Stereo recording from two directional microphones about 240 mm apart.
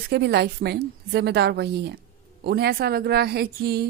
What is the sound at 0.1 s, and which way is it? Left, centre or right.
A woman's voice, right.